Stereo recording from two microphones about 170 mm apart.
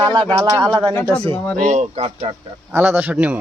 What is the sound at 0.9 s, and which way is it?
Speech, 20° left (ahead or behind).